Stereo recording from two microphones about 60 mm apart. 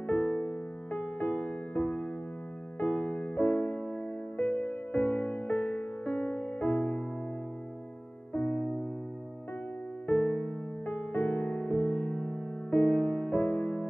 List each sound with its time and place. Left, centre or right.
0.0 s music: left
8.3 s music: left
10.0 s music: left
13.4 s music: left